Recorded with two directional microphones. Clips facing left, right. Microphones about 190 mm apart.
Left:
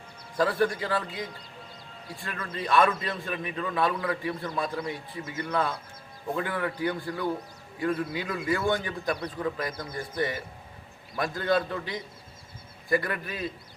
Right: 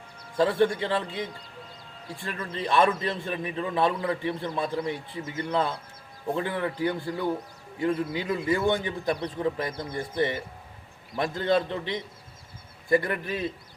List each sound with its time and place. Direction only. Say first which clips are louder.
0.3 s a man's voice: right 3 dB; 25° right (ahead or behind)